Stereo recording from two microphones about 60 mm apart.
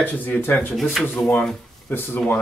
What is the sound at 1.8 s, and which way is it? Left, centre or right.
Speech, left.